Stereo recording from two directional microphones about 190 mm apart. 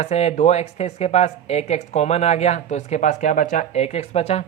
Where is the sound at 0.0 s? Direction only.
35° left (ahead or behind).